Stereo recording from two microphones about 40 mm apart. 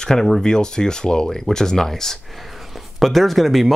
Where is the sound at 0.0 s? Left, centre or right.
Centre.